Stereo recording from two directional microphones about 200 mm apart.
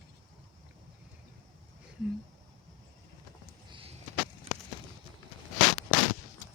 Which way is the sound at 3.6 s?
25° right (ahead or behind).